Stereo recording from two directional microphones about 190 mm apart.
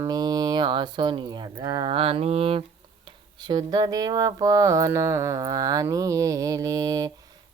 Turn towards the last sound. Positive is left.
turn(degrees=-20)  # may be behind; listen again after turning